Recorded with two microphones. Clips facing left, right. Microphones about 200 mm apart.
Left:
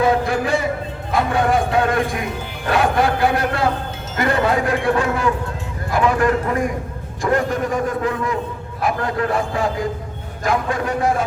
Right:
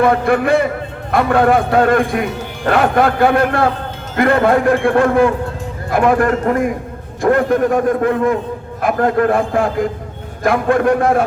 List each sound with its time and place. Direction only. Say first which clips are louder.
0.0 s a man's voice: right 4 dB; 60° right (ahead or behind)